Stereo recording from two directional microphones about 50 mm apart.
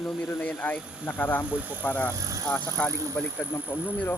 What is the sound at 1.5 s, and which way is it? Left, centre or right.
Speech, right.